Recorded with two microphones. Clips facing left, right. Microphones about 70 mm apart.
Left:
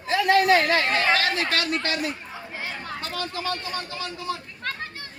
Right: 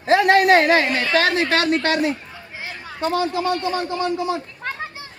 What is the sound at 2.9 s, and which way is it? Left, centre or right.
A man's voice, centre.